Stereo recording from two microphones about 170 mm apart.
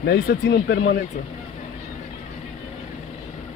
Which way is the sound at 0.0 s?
70° left (ahead or behind).